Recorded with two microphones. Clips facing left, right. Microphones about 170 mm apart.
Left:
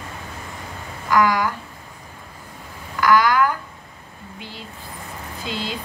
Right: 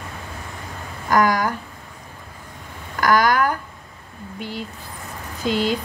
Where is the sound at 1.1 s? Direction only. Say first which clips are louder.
Even; 45° right (ahead or behind).